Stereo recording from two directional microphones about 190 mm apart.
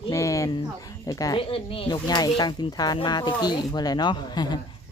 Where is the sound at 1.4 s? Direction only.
30° left (ahead or behind).